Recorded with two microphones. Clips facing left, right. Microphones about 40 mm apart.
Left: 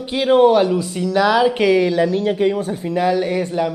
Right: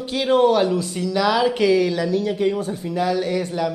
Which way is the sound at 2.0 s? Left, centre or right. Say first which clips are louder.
Left 3 dB; left.